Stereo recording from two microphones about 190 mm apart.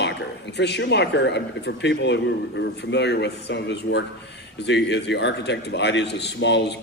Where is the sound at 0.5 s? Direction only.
65° left (ahead or behind).